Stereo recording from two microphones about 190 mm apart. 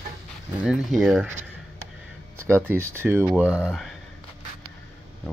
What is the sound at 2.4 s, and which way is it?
Speech, 10° right (ahead or behind).